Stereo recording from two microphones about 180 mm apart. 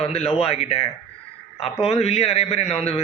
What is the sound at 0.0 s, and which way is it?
Speech, 35° left (ahead or behind).